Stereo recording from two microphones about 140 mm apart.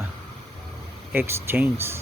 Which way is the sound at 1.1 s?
15° right (ahead or behind).